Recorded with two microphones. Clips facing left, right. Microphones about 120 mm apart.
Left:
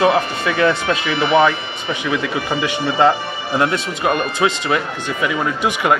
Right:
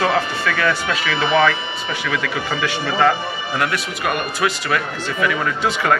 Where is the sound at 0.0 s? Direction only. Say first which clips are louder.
Left 3 dB; 15° left (ahead or behind).